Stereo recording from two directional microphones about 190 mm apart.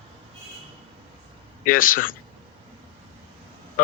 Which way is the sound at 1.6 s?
45° left (ahead or behind).